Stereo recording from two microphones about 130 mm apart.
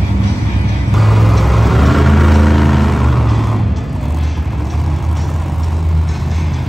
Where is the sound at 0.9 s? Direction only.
Centre (ahead or behind).